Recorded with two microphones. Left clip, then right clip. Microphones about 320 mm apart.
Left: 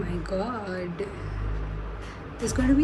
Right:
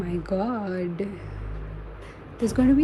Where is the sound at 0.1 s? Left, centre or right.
Centre.